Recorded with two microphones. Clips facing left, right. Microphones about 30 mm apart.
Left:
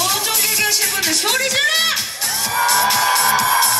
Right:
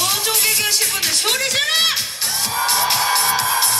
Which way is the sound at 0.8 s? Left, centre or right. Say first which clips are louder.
Left 1 dB; centre.